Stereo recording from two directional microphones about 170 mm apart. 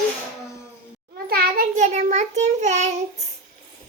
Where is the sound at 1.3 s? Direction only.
65° right (ahead or behind).